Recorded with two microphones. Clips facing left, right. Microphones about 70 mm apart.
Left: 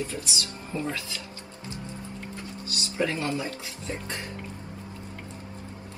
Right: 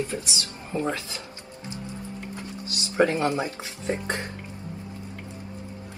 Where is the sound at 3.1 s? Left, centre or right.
Right.